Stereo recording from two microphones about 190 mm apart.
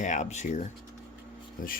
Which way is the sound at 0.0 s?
40° left (ahead or behind).